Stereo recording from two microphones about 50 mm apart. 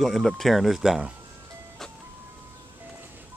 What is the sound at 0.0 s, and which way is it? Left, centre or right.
Speech, centre.